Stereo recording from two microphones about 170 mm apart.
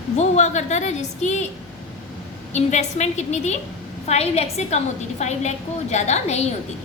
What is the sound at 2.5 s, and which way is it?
A woman's voice, 40° left (ahead or behind).